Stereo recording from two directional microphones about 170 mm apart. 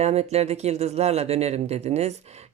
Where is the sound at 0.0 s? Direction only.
40° right (ahead or behind).